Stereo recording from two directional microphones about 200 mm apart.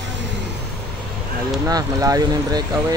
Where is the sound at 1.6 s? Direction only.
15° right (ahead or behind).